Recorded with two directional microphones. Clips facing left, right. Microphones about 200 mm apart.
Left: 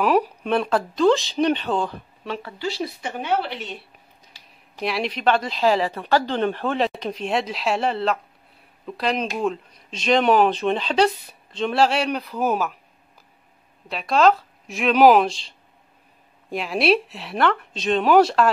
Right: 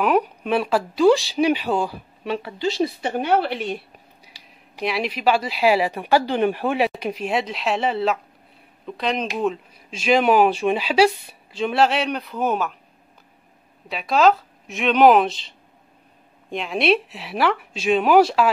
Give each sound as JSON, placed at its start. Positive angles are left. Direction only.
{"t": 0.0, "sound": "speech", "side_deg": 0}
{"t": 3.0, "sound": "speech", "side_deg": -40}
{"t": 4.3, "sound": "a sound", "side_deg": -5}
{"t": 4.8, "sound": "speech", "side_deg": 0}
{"t": 13.8, "sound": "speech", "side_deg": 0}